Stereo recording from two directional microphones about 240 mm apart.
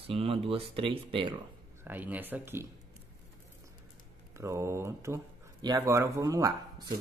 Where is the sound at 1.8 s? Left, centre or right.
Centre.